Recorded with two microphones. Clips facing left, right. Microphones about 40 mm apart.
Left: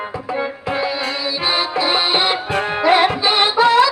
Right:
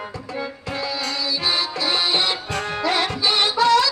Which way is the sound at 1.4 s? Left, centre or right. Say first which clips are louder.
Left 6 dB; left.